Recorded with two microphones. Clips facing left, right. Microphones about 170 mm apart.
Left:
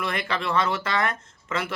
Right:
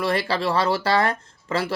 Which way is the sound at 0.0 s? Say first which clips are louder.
Right 5 dB; 35° right (ahead or behind).